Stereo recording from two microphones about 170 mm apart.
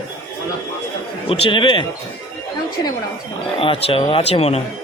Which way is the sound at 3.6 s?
35° left (ahead or behind).